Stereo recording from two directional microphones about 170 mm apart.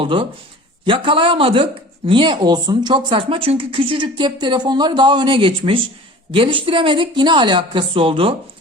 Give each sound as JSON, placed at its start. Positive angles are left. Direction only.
{"t": 0.0, "sound": "a man's voice", "side_deg": -30}